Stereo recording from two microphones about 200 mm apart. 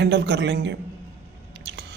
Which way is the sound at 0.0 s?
60° right (ahead or behind).